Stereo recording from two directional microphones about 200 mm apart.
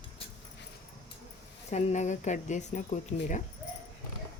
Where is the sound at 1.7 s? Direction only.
35° left (ahead or behind).